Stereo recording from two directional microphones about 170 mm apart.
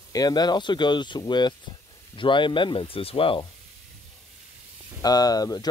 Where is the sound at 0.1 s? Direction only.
25° left (ahead or behind).